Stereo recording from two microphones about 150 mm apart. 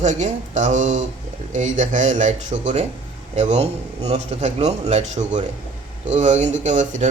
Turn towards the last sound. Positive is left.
turn(degrees=-55)  # may be behind; listen again after turning